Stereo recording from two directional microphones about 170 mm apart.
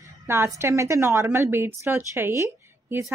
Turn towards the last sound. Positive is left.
turn(degrees=-15)  # may be behind; listen again after turning